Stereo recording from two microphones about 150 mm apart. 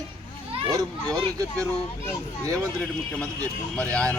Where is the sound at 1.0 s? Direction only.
5° left (ahead or behind).